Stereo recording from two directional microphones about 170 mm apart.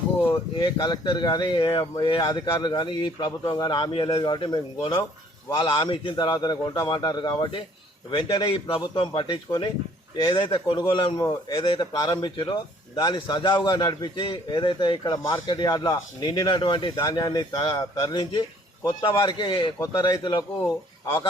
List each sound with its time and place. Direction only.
0.6 s a man's voice: 25° left (ahead or behind)